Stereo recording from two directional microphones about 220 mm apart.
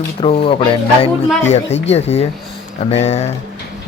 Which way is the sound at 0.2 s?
25° left (ahead or behind).